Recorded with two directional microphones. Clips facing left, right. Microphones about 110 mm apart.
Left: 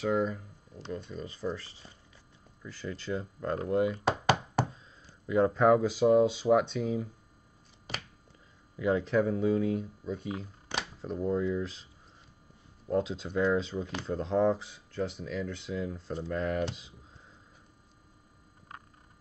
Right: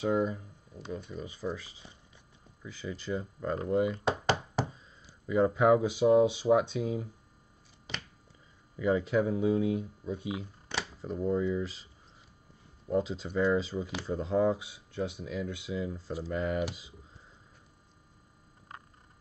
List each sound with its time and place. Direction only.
0.0 s speech: 15° right (ahead or behind)
8.7 s speech: centre (ahead or behind)
9.0 s speech: 10° right (ahead or behind)
12.9 s speech: centre (ahead or behind)